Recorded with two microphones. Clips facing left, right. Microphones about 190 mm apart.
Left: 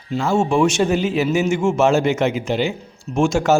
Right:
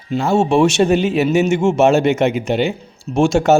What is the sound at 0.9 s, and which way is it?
Speech, 70° right (ahead or behind).